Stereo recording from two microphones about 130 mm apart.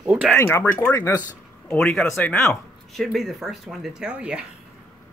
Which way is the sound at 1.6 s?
5° left (ahead or behind).